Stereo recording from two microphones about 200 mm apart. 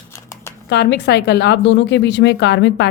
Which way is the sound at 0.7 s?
55° left (ahead or behind).